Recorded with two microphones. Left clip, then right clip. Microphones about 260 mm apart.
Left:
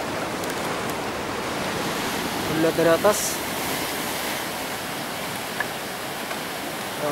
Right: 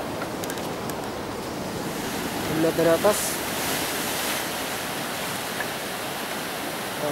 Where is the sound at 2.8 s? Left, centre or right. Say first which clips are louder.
Left 1 dB; centre.